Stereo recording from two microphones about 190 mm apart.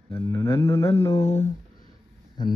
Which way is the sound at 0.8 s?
30° left (ahead or behind).